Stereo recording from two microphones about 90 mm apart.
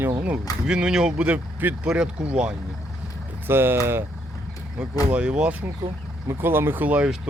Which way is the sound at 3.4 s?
25° right (ahead or behind).